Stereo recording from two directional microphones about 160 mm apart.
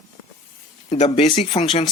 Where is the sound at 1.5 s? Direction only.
30° left (ahead or behind).